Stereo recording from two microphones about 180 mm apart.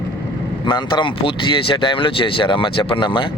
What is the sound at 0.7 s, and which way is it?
Speech, 25° left (ahead or behind).